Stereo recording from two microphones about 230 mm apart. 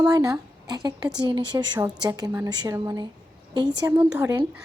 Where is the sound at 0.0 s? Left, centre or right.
Centre.